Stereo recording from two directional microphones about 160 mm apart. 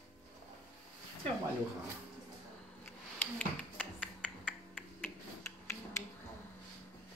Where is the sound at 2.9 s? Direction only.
10° left (ahead or behind).